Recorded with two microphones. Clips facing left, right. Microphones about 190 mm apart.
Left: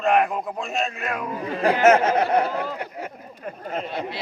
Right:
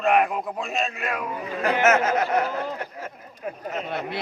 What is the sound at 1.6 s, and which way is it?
Speech, 30° left (ahead or behind).